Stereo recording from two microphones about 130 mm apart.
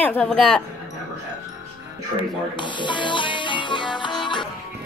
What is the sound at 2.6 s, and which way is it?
Music, 35° left (ahead or behind).